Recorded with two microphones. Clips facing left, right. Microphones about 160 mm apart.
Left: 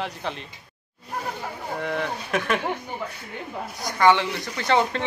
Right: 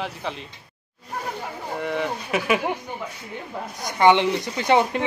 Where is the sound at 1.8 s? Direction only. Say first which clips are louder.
Right 2 dB; centre (ahead or behind).